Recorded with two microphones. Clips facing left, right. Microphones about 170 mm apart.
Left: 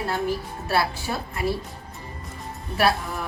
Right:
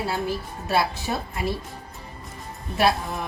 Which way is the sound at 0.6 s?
20° right (ahead or behind).